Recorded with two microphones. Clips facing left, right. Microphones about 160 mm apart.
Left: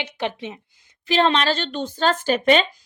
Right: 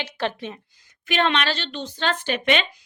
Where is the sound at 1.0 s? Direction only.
35° left (ahead or behind).